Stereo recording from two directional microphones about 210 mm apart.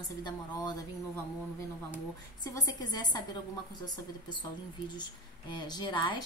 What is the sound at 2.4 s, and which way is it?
A woman's voice, 20° left (ahead or behind).